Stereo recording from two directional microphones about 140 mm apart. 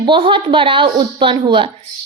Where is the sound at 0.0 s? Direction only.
35° right (ahead or behind).